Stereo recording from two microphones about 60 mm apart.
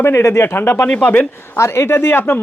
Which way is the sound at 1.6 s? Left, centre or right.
Left.